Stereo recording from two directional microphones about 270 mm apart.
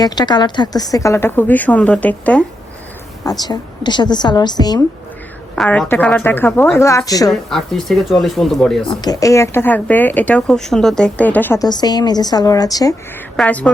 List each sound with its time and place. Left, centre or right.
0.0 s speech: centre
5.5 s speech: centre
7.3 s speech: centre
8.9 s speech: centre